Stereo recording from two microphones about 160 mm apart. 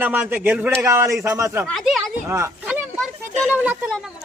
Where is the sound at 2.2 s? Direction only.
15° right (ahead or behind).